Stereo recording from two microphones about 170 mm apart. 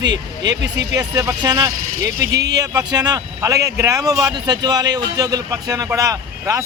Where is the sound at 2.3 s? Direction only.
80° right.